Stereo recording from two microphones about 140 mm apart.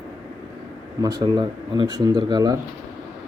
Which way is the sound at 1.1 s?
30° right (ahead or behind).